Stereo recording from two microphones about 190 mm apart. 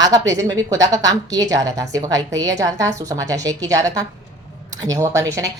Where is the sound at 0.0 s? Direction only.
20° right (ahead or behind).